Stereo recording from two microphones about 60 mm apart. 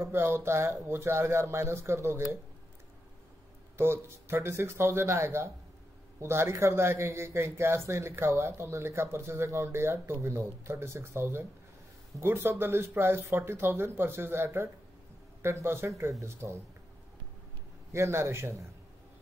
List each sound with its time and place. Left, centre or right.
0.0 s a man's voice: right
3.7 s a man's voice: right
16.0 s a man's voice: right
17.9 s a man's voice: right